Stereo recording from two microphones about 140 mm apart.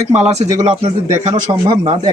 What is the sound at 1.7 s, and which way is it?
Speech, 35° right (ahead or behind).